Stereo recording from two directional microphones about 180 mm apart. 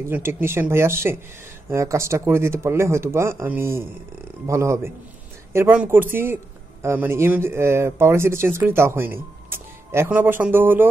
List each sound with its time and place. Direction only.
0.0 s speech: 15° right (ahead or behind)